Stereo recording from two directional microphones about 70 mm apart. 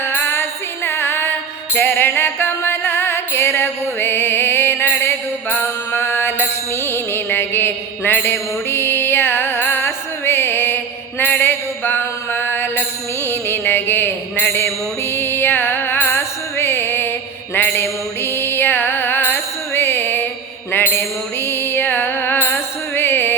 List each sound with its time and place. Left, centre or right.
0.0 s music: left
6.8 s mantra: left
11.2 s a sound: left
13.2 s music: left
20.7 s mantra: left
21.4 s music: left